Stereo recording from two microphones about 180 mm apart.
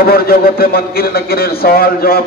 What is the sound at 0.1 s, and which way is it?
A man's voice, 60° left (ahead or behind).